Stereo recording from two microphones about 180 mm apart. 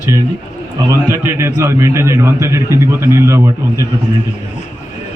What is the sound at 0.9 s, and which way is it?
A man's voice, 15° right (ahead or behind).